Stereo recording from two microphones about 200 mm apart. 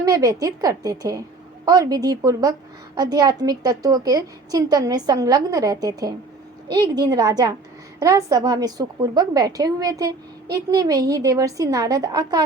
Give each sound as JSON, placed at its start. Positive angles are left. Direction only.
{"t": 0.0, "sound": "a woman's voice", "side_deg": -15}